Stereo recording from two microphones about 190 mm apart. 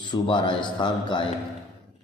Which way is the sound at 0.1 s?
25° left (ahead or behind).